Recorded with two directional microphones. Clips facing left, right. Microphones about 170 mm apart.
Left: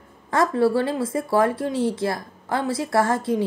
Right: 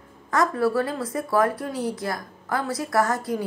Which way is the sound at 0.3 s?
30° left (ahead or behind).